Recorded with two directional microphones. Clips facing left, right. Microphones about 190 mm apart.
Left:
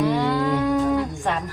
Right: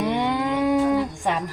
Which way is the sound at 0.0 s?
20° right (ahead or behind).